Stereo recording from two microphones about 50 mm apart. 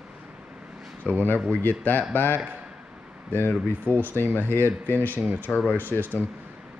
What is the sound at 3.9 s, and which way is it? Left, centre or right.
Speech, left.